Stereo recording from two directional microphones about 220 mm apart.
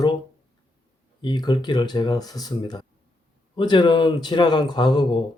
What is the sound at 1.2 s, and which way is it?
Speech, 20° left (ahead or behind).